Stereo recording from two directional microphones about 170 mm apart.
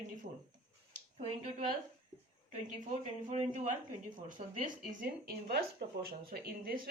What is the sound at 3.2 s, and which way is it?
Speech, 45° right (ahead or behind).